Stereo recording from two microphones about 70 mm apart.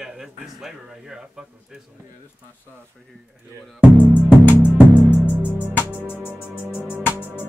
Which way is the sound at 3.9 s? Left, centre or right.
Left.